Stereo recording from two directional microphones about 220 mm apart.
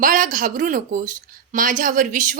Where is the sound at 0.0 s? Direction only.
40° right (ahead or behind).